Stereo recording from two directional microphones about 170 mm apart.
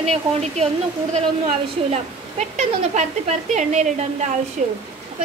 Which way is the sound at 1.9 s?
45° right (ahead or behind).